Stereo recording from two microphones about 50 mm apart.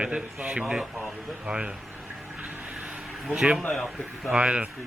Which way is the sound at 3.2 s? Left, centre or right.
Centre.